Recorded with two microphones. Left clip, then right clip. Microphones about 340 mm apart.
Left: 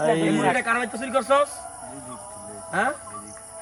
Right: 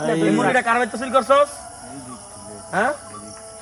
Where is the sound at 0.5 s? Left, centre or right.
Centre.